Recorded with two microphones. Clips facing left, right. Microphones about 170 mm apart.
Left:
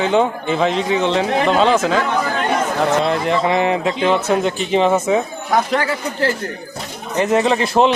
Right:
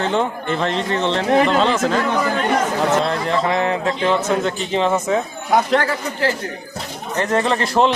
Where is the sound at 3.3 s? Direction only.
15° left (ahead or behind).